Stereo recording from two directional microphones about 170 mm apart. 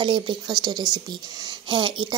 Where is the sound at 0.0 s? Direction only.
30° right (ahead or behind).